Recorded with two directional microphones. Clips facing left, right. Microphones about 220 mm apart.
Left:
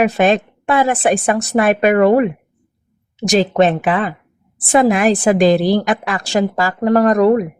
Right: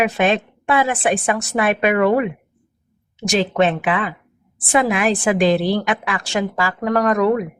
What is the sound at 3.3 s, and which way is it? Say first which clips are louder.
A woman's voice: left 4 dB; 40° left (ahead or behind).